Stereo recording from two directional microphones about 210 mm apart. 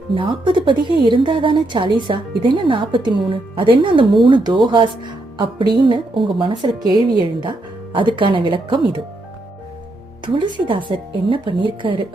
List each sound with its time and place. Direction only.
0.1 s a woman's voice: 25° right (ahead or behind)
10.2 s a woman's voice: 25° right (ahead or behind)